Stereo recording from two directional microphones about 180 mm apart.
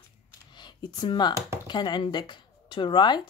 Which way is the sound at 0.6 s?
25° left (ahead or behind).